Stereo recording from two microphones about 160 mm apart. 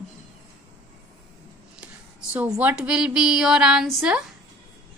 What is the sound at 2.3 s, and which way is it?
A woman's voice, 10° right (ahead or behind).